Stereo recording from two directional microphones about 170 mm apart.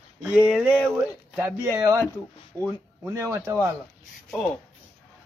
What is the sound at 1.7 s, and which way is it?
Speech, 20° right (ahead or behind).